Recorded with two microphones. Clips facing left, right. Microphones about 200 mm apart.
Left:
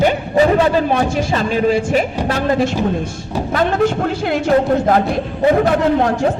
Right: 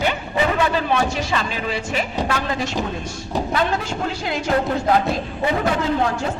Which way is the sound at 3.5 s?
50° left (ahead or behind).